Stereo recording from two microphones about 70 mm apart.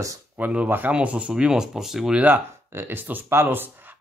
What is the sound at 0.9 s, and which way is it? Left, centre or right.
Speech, centre.